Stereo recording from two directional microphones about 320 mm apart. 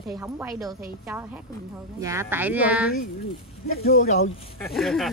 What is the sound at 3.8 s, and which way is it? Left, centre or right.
Speech, left.